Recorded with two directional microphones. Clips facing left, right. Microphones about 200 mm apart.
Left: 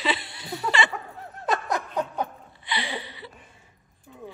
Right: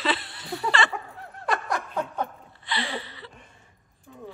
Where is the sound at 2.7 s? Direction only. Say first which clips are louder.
Right 1 dB; 20° left (ahead or behind).